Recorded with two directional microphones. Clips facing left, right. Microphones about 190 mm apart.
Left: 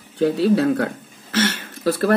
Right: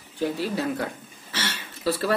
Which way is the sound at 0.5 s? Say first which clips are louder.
Left 9 dB; 75° left (ahead or behind).